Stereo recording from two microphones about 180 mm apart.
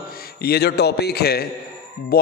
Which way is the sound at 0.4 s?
60° left (ahead or behind).